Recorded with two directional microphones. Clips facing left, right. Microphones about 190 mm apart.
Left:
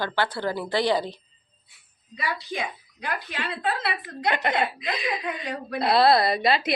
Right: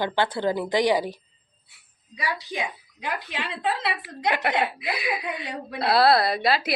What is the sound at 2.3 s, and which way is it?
A woman's voice, 15° right (ahead or behind).